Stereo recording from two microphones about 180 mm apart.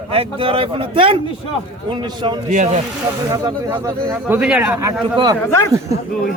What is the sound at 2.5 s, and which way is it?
Speech, 40° right (ahead or behind).